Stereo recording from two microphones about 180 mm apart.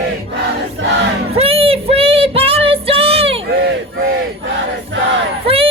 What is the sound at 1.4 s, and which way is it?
Child singing, 30° right (ahead or behind).